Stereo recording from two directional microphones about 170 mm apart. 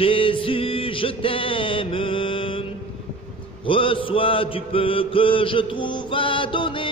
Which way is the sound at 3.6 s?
30° left (ahead or behind).